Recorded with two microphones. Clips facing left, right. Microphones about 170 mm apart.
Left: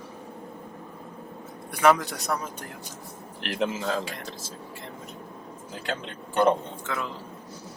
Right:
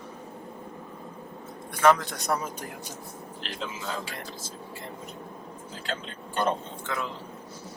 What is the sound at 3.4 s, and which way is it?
Speech, 70° left (ahead or behind).